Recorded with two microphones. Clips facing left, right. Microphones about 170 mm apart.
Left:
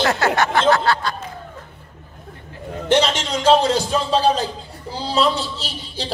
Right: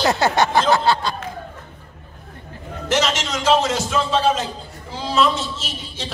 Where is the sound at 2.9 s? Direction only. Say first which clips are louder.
Left 3 dB; 30° left (ahead or behind).